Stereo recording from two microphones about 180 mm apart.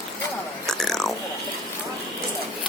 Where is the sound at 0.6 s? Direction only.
Centre (ahead or behind).